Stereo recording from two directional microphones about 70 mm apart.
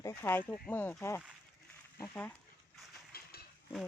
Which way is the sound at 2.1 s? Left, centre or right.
Left.